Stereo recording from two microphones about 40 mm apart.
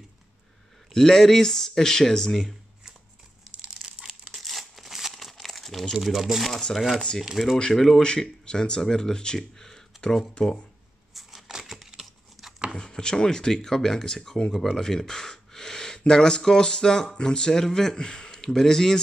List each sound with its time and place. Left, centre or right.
0.9 s speech: centre
4.3 s crumpling: centre
5.9 s speech: centre
8.0 s speech: left
11.6 s a sound: centre
12.0 s crumpling: centre
12.7 s speech: centre
14.5 s gasp: centre
16.1 s speech: centre